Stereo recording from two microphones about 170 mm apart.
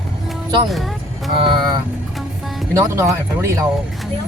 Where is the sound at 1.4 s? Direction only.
30° right (ahead or behind).